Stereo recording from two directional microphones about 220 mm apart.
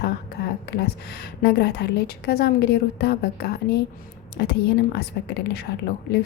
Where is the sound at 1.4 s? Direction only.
50° left (ahead or behind).